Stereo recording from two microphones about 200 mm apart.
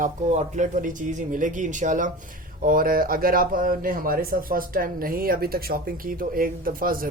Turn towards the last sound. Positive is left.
turn(degrees=-45)  # may be behind; listen again after turning